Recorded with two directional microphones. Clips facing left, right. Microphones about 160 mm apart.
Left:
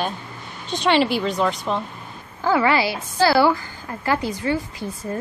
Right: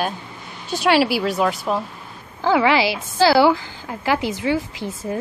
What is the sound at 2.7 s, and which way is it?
Speech, 90° right.